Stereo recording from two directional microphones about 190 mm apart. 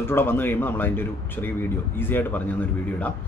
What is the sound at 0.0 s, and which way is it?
Speech, 10° left (ahead or behind).